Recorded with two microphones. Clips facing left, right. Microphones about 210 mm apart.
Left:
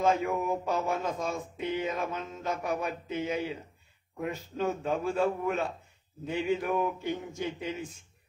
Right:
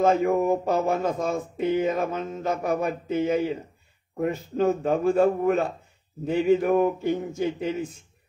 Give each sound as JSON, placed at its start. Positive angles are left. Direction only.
{"t": 0.0, "sound": "speech", "side_deg": -40}